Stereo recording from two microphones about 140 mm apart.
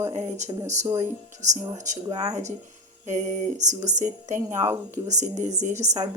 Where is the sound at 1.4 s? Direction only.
55° right (ahead or behind).